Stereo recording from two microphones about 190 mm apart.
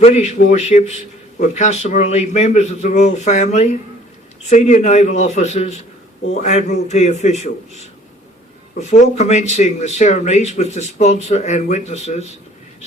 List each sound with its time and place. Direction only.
0.0 s speech: 35° left (ahead or behind)
8.9 s speech: 35° left (ahead or behind)